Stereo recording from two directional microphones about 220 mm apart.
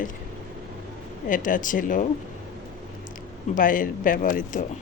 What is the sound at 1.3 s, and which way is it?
Speech, 35° left (ahead or behind).